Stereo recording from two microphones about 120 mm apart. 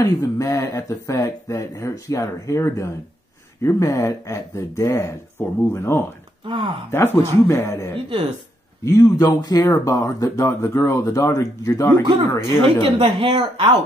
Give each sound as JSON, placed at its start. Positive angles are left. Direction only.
{"t": 0.0, "sound": "speech", "side_deg": 25}
{"t": 6.4, "sound": "speech", "side_deg": -45}
{"t": 6.9, "sound": "speech", "side_deg": 20}
{"t": 12.3, "sound": "speech", "side_deg": 15}
{"t": 13.0, "sound": "speech", "side_deg": -40}